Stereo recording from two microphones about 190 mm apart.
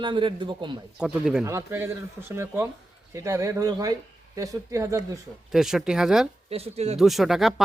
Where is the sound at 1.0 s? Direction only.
Centre (ahead or behind).